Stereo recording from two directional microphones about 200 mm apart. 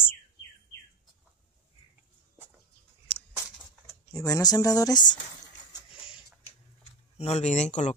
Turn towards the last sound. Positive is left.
turn(degrees=35)  # may be behind; listen again after turning